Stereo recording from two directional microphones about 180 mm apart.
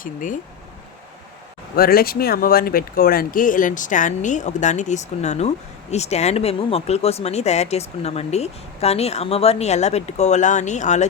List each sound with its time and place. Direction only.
0.0 s speech: 50° left (ahead or behind)
1.7 s speech: 55° left (ahead or behind)